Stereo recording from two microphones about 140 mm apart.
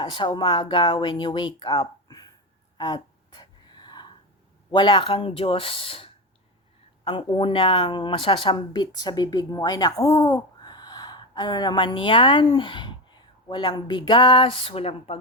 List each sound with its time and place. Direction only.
0.0 s a woman's voice: 35° left (ahead or behind)
2.7 s a sound: 30° left (ahead or behind)
4.7 s a woman's voice: 35° left (ahead or behind)